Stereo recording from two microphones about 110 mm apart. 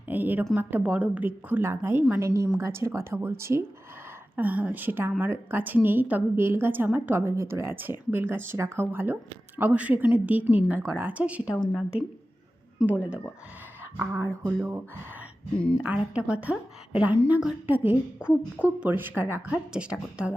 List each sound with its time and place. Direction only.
0.1 s a woman's voice: 15° right (ahead or behind)
4.4 s a woman's voice: 15° right (ahead or behind)
13.9 s a woman's voice: 20° right (ahead or behind)
14.6 s a woman's voice: 15° right (ahead or behind)